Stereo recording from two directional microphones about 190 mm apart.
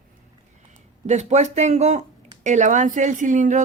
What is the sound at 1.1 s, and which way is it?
Speech, 35° right (ahead or behind).